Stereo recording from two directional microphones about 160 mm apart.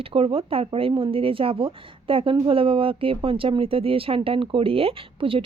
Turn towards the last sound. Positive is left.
turn(degrees=-35)  # may be behind; listen again after turning